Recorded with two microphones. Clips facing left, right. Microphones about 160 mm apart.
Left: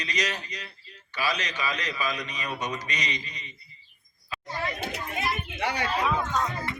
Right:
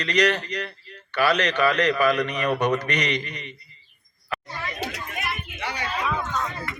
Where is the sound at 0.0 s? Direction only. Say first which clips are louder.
Right 10 dB; 65° right (ahead or behind).